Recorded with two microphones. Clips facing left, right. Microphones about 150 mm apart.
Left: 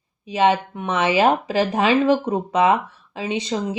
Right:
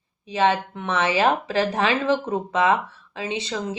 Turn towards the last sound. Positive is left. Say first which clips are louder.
# left 3 dB
turn(degrees=15)  # may be behind; listen again after turning